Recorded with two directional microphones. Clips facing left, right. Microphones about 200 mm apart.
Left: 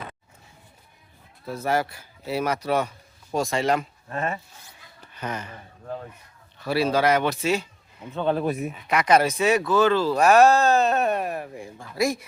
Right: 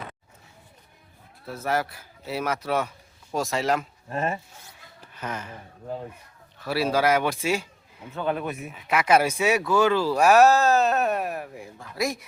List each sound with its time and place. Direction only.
1.5 s a man's voice: centre (ahead or behind)
8.1 s speech: 25° left (ahead or behind)
8.7 s speech: 5° right (ahead or behind)